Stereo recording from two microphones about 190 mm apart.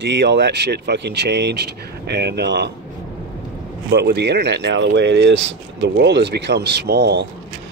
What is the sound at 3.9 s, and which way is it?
Speech, 60° right (ahead or behind).